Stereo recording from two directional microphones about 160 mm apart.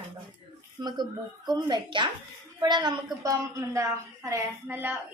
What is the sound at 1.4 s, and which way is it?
A woman's voice, 25° right (ahead or behind).